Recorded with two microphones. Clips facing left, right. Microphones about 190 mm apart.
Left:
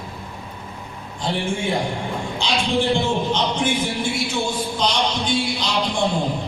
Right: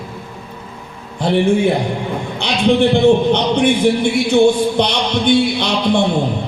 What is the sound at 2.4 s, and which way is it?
A man's voice, 60° right (ahead or behind).